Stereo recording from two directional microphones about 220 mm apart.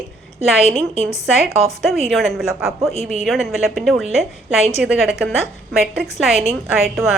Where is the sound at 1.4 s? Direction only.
Centre (ahead or behind).